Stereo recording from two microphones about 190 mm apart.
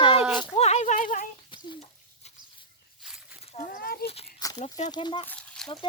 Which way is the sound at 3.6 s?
50° left (ahead or behind).